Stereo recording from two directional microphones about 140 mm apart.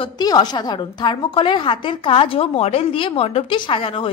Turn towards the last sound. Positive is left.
turn(degrees=40)  # may be behind; listen again after turning